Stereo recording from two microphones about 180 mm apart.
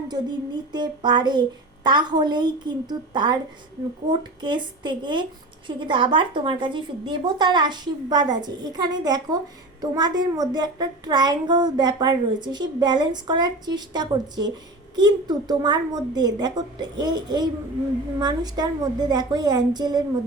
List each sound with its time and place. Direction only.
0.1 s a child's voice: 25° right (ahead or behind)